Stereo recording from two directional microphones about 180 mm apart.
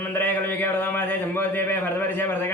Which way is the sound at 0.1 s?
10° left (ahead or behind).